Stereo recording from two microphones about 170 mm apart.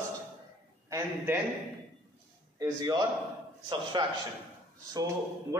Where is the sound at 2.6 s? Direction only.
20° right (ahead or behind).